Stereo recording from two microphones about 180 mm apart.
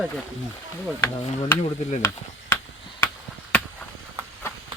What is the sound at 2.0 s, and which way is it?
Speech, 15° left (ahead or behind).